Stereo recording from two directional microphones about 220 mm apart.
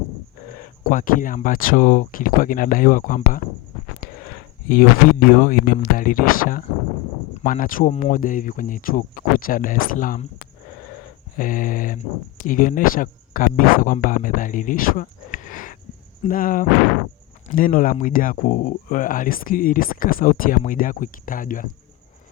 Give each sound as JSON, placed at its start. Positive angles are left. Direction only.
{"t": 0.5, "sound": "speech", "side_deg": 35}
{"t": 11.3, "sound": "speech", "side_deg": 40}